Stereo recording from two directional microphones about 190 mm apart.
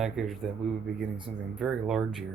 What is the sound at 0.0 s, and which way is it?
Speech, centre (ahead or behind).